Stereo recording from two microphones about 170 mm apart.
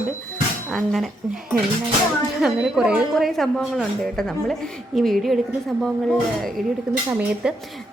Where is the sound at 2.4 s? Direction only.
5° right (ahead or behind).